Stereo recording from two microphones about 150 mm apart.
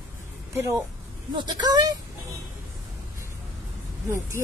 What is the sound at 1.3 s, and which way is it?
Speech, 30° right (ahead or behind).